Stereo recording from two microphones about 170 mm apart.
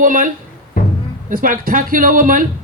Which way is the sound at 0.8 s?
55° left (ahead or behind).